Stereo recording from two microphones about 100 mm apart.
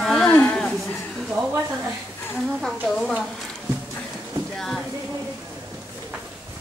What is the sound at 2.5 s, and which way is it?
Speech, 5° left (ahead or behind).